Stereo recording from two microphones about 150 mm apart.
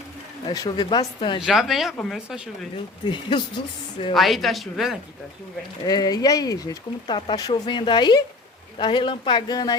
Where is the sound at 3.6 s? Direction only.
45° left (ahead or behind).